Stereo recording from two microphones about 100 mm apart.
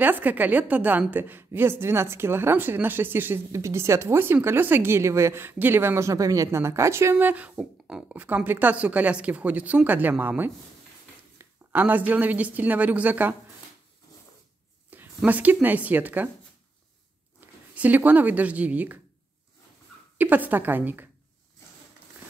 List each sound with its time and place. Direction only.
0.0 s a woman's voice: 20° right (ahead or behind)
14.9 s speech: 15° right (ahead or behind)
17.4 s a sound: 20° right (ahead or behind)
17.7 s a woman's voice: 15° right (ahead or behind)
20.2 s speech: 15° right (ahead or behind)